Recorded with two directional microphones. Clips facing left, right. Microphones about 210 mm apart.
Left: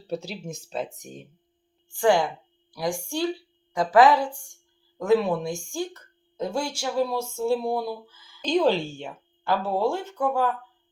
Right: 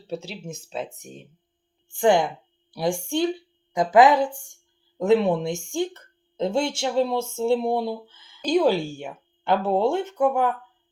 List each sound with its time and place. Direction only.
0.1 s speech: centre (ahead or behind)
1.9 s a woman's voice: 20° right (ahead or behind)
8.4 s speech: 10° right (ahead or behind)
9.4 s speech: 20° right (ahead or behind)